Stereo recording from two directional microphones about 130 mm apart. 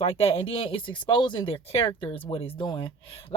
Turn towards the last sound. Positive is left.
turn(degrees=40)  # may be behind; listen again after turning